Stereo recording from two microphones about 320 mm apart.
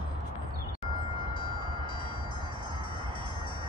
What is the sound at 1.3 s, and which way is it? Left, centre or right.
Music, centre.